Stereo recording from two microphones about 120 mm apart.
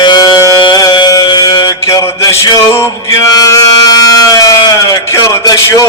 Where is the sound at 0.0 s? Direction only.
35° left (ahead or behind).